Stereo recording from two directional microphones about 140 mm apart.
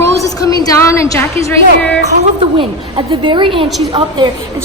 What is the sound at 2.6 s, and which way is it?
A woman's voice, 35° right (ahead or behind).